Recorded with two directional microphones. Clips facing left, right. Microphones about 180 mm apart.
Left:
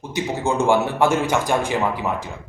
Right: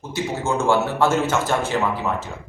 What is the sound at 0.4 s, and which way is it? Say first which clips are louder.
A man's voice: left 1 dB; 15° left (ahead or behind).